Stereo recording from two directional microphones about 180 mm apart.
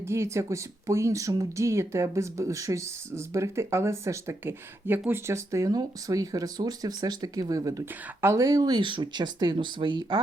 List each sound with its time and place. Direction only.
0.0 s speech: 15° right (ahead or behind)